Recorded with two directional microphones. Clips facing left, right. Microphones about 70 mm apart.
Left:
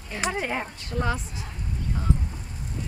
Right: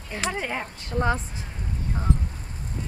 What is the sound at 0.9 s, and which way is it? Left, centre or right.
Speech, right.